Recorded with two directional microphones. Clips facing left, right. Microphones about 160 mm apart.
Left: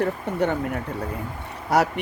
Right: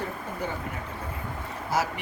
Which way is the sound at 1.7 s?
65° left (ahead or behind).